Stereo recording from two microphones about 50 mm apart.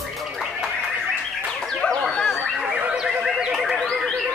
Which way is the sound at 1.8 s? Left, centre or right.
Centre.